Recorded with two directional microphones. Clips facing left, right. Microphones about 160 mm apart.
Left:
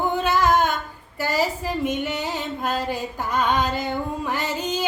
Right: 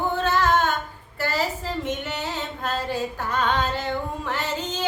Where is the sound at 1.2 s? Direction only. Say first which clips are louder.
Left 3 dB; 10° left (ahead or behind).